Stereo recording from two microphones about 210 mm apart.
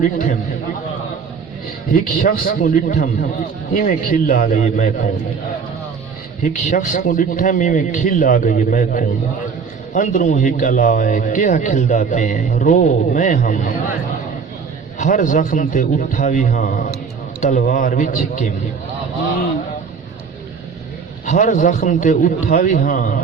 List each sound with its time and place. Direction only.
1.9 s a man's voice: 40° left (ahead or behind)
6.4 s a man's voice: 40° left (ahead or behind)
14.9 s a man's voice: 35° left (ahead or behind)
21.2 s a man's voice: 35° left (ahead or behind)